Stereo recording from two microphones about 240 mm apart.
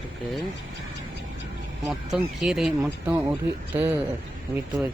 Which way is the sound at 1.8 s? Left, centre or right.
Centre.